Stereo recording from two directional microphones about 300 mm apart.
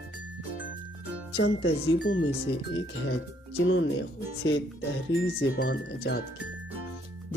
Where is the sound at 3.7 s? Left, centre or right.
Left.